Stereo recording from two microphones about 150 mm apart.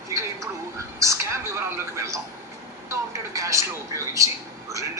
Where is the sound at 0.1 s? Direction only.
20° right (ahead or behind).